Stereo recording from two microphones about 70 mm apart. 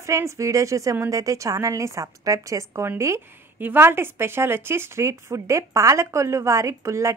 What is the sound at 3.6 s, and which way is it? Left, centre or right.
A woman's voice, right.